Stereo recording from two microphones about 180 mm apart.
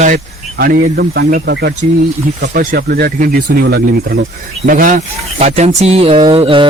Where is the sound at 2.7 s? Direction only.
60° right (ahead or behind).